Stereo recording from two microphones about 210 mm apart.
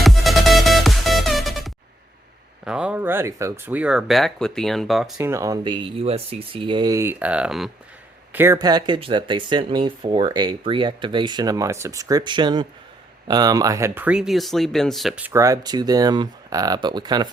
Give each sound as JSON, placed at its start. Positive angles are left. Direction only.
{"t": 0.0, "sound": "music", "side_deg": 0}
{"t": 2.6, "sound": "speech", "side_deg": -5}
{"t": 5.1, "sound": "a man's voice", "side_deg": -15}